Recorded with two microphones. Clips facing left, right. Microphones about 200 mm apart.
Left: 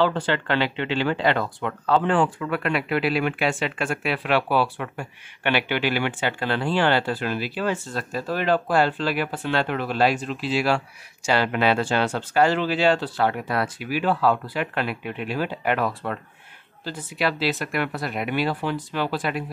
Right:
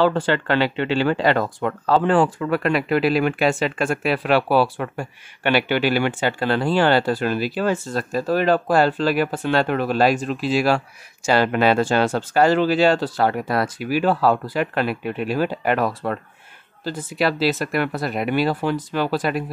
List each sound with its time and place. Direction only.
0.0 s speech: 45° right (ahead or behind)